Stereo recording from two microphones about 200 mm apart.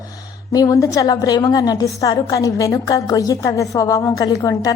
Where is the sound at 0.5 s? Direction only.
20° left (ahead or behind).